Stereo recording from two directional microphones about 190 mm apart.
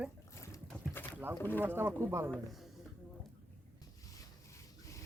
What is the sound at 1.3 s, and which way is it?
Speech, 10° left (ahead or behind).